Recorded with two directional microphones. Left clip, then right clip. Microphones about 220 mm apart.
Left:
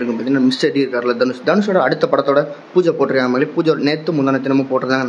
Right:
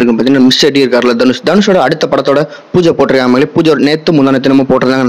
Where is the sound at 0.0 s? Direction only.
40° right (ahead or behind).